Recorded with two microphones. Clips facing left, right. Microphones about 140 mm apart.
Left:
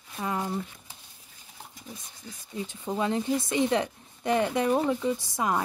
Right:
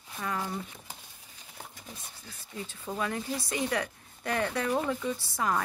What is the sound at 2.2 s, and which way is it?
Speech, 15° left (ahead or behind).